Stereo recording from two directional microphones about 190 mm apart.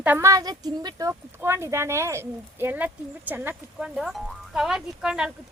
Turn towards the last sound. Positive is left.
turn(degrees=-5)  # may be behind; listen again after turning